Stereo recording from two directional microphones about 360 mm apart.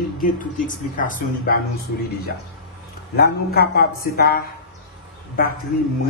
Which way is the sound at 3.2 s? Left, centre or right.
Left.